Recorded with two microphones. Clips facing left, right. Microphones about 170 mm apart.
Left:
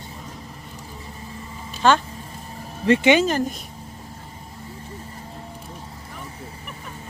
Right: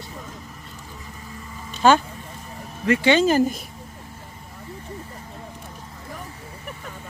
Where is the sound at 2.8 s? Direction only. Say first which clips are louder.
Left 3 dB; 30° left (ahead or behind).